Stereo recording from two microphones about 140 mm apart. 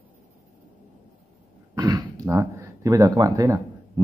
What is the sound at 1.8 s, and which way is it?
Throat clearing, 25° right (ahead or behind).